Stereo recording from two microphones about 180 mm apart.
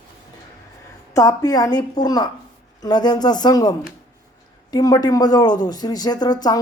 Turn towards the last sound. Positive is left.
turn(degrees=20)  # may be behind; listen again after turning